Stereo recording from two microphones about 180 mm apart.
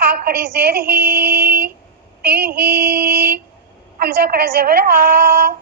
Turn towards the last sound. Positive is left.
turn(degrees=-60)  # may be behind; listen again after turning